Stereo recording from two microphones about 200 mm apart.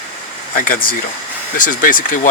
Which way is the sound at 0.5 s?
45° left (ahead or behind).